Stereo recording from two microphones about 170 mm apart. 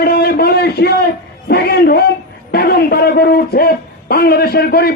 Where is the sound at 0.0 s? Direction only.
70° left (ahead or behind).